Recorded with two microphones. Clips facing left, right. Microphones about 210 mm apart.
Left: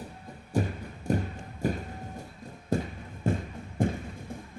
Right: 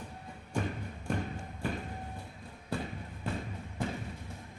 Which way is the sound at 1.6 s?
40° left (ahead or behind).